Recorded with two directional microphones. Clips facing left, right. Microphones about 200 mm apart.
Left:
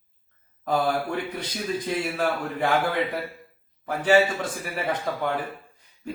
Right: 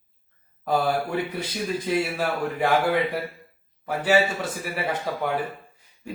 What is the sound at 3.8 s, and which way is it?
A man's voice, 5° right (ahead or behind).